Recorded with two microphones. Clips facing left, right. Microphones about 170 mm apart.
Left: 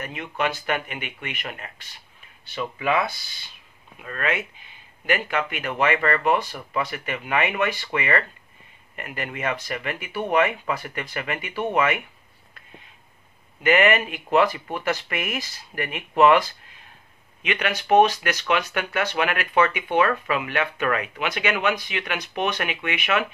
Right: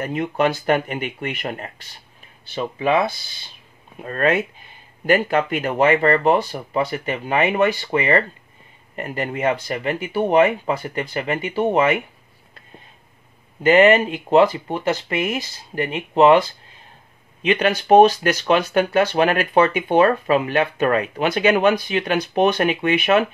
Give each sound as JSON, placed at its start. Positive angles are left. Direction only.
{"t": 0.0, "sound": "speech", "side_deg": -40}
{"t": 4.0, "sound": "speech", "side_deg": -40}
{"t": 13.6, "sound": "speech", "side_deg": -30}